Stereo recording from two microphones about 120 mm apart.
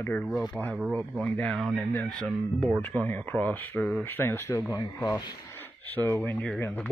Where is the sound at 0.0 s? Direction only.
15° left (ahead or behind).